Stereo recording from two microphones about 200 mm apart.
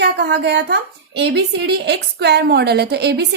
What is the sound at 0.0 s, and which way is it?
A woman's voice, 55° right (ahead or behind).